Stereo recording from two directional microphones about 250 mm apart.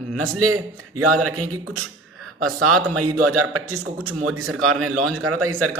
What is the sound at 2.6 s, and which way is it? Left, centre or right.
A man's voice, right.